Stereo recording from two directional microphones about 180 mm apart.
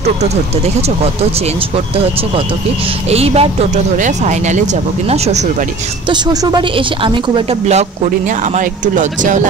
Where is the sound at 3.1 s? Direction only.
35° right (ahead or behind).